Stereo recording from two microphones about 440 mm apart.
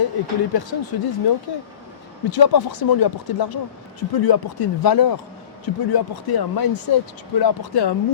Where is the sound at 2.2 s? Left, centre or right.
Left.